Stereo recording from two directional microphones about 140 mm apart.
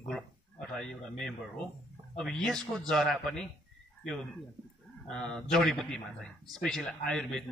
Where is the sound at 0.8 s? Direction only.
5° left (ahead or behind).